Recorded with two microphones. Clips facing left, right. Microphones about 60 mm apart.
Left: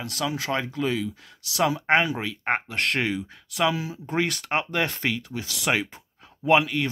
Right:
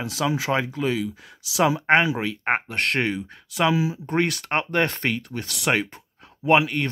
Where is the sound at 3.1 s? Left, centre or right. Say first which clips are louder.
Even; centre.